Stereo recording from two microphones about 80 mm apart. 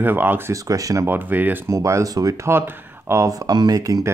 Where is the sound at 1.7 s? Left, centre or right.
Right.